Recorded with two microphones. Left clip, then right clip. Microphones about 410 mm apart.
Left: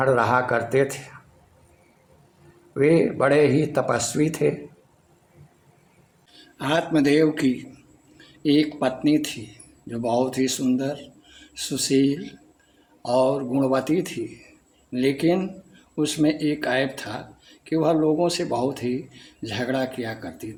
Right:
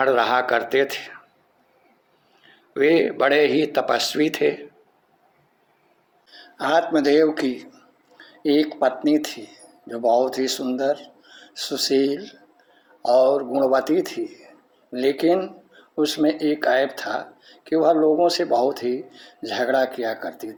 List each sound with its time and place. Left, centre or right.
0.0 s speech: centre
2.7 s speech: centre
6.6 s speech: centre